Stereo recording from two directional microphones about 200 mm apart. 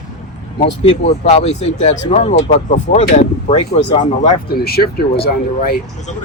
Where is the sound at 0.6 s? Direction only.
30° left (ahead or behind).